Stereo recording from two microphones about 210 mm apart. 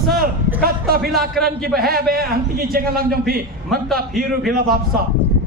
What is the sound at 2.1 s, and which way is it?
A man's voice, 45° right (ahead or behind).